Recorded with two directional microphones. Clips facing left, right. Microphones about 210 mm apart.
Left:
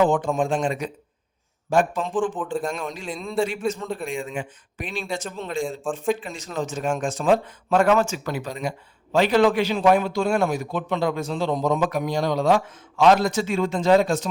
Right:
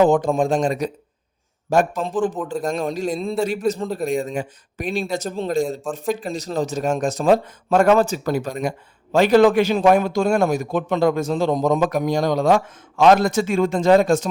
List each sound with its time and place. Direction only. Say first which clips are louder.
0.0 s a man's voice: right 4 dB; 40° right (ahead or behind)